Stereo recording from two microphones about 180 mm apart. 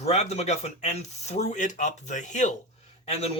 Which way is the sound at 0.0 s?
40° left (ahead or behind).